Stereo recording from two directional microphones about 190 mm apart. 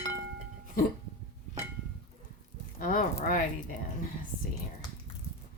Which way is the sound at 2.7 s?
50° left (ahead or behind).